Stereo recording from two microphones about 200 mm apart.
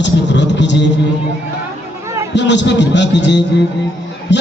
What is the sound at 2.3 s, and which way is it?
A man's voice, 60° left (ahead or behind).